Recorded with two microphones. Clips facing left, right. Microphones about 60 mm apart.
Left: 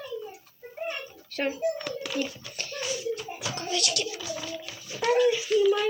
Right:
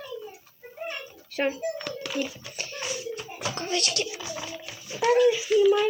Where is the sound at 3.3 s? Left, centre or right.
Right.